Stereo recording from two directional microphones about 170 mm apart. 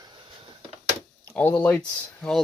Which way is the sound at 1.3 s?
10° left (ahead or behind).